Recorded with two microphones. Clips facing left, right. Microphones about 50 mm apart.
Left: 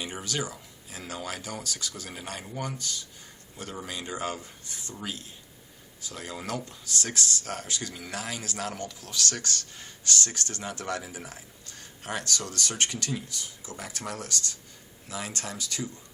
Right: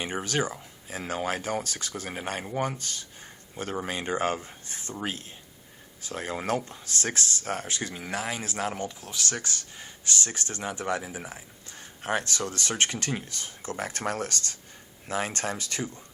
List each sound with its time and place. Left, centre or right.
0.0 s speech: right